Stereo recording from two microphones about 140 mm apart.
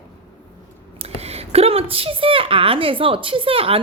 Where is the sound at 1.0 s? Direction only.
45° right (ahead or behind).